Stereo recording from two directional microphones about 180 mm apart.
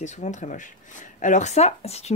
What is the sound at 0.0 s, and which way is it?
Speech, 40° left (ahead or behind).